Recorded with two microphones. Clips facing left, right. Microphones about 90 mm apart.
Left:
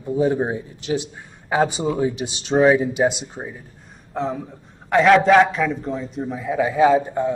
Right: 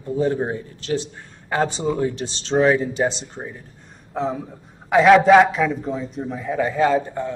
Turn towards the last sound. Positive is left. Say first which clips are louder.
# left 3 dB
turn(degrees=10)  # may be behind; listen again after turning